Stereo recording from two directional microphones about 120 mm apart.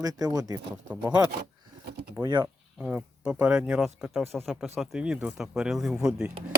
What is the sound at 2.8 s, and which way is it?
Speech, 10° right (ahead or behind).